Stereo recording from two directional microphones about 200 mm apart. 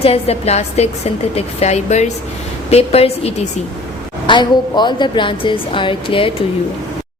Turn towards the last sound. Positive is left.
turn(degrees=25)  # may be behind; listen again after turning